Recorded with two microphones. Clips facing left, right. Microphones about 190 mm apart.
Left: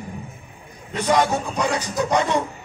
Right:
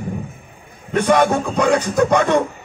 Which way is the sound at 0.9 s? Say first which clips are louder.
Right 5 dB; 60° right (ahead or behind).